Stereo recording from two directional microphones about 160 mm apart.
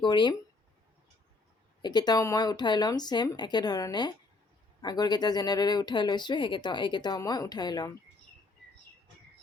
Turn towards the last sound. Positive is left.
turn(degrees=25)  # may be behind; listen again after turning